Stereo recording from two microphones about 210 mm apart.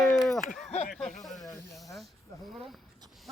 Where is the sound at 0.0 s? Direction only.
Centre (ahead or behind).